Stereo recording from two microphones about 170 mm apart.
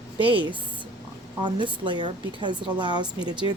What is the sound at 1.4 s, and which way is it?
A woman's voice, 25° right (ahead or behind).